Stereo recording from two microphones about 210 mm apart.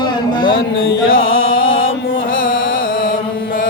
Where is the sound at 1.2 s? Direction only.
70° left (ahead or behind).